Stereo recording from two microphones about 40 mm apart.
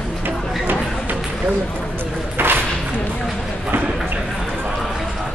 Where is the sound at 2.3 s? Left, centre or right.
Right.